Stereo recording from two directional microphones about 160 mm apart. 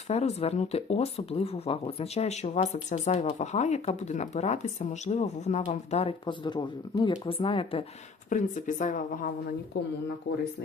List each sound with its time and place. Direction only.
0.1 s speech: 40° left (ahead or behind)
8.3 s speech: 50° left (ahead or behind)